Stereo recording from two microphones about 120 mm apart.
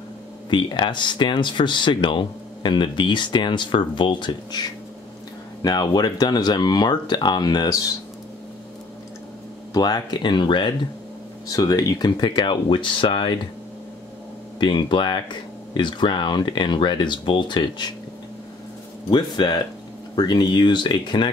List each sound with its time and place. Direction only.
0.5 s speech: 40° left (ahead or behind)
9.8 s speech: 35° left (ahead or behind)
11.4 s speech: 30° left (ahead or behind); by 13.3 s 45° left (ahead or behind)
14.6 s speech: 40° left (ahead or behind)
19.0 s speech: 40° left (ahead or behind)